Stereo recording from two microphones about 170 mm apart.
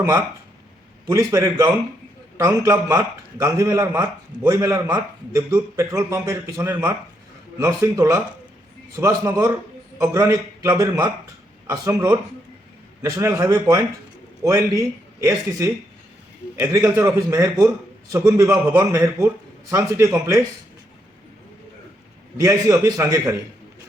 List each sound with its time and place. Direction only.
1.0 s a man's voice: 20° right (ahead or behind)
22.4 s a man's voice: 20° right (ahead or behind)